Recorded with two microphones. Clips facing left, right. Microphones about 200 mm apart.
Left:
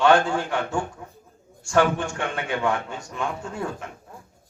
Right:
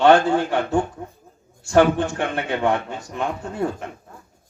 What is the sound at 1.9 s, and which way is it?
A man's voice, 35° right (ahead or behind).